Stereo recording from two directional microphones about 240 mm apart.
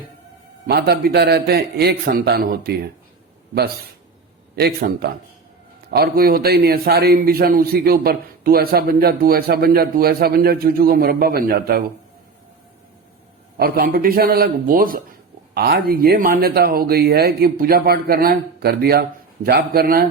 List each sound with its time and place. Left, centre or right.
0.7 s a man's voice: right
4.5 s a man's voice: right
13.6 s a man's voice: right